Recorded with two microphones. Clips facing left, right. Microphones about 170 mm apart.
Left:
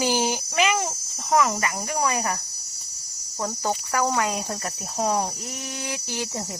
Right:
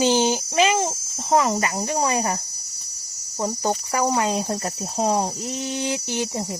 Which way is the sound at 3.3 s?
20° right (ahead or behind).